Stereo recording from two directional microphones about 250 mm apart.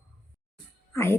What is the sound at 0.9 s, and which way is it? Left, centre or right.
Speech, centre.